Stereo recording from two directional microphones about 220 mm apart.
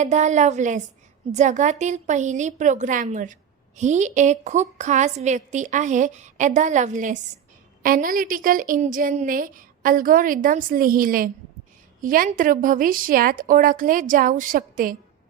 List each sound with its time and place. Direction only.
0.0 s a woman's voice: 35° right (ahead or behind)